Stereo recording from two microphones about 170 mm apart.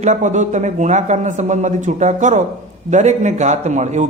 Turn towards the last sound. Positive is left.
turn(degrees=-45)  # may be behind; listen again after turning